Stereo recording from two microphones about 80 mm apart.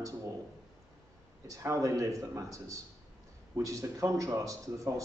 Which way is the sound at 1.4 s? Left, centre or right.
Right.